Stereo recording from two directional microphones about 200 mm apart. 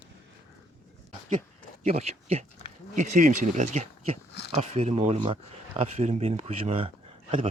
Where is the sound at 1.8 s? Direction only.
35° right (ahead or behind).